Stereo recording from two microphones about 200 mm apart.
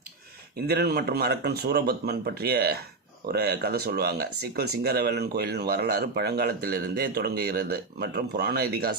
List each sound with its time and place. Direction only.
0.7 s speech: 50° right (ahead or behind)